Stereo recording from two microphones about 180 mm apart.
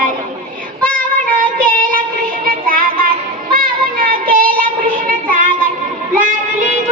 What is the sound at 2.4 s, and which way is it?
Music, 50° right (ahead or behind).